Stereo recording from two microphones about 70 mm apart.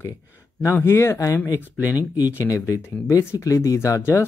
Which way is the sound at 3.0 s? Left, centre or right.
Left.